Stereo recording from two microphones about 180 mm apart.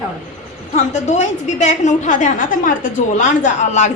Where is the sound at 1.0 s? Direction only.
40° left (ahead or behind).